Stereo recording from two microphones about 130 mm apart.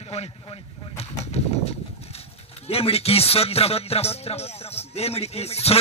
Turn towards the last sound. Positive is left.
turn(degrees=50)  # may be behind; listen again after turning